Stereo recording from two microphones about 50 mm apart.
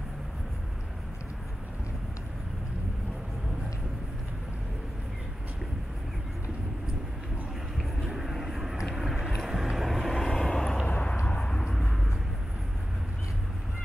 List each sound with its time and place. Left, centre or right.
8.0 s vehicle: centre
10.9 s vehicle: left
11.7 s vehicle: centre